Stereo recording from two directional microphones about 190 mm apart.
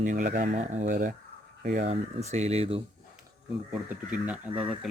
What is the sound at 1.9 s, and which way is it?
Speech, 35° right (ahead or behind).